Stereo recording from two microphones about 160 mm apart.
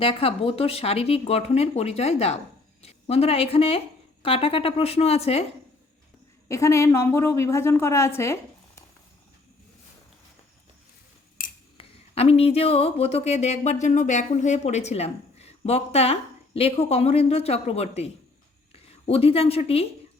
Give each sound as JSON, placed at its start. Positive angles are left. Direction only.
{"t": 0.0, "sound": "a woman's voice", "side_deg": 35}
{"t": 6.5, "sound": "a woman's voice", "side_deg": 20}
{"t": 11.8, "sound": "a woman's voice", "side_deg": 40}